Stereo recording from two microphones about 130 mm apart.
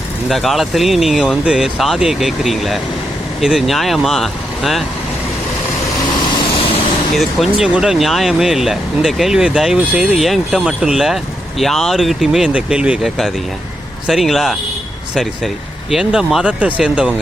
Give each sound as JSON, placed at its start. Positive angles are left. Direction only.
{"t": 0.3, "sound": "speech", "side_deg": 0}
{"t": 6.4, "sound": "vehicle", "side_deg": 45}
{"t": 7.2, "sound": "speech", "side_deg": 0}
{"t": 15.9, "sound": "speech", "side_deg": -5}